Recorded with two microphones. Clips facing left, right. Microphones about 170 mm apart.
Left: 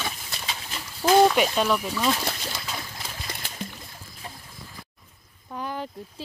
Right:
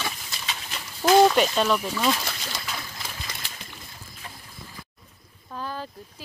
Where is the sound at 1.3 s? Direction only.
10° left (ahead or behind).